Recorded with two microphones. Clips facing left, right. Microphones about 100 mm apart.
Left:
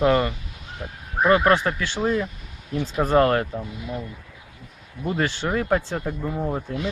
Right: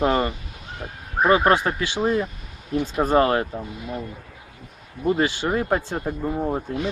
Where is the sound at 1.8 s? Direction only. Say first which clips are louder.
Right 1 dB; 10° right (ahead or behind).